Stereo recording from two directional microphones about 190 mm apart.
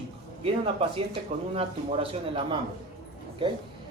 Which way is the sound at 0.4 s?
30° right (ahead or behind).